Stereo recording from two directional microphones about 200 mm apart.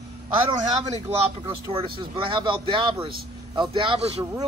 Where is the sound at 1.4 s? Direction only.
25° right (ahead or behind).